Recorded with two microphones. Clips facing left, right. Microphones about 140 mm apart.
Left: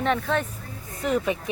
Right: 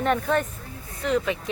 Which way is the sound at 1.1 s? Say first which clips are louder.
Even; 15° left (ahead or behind).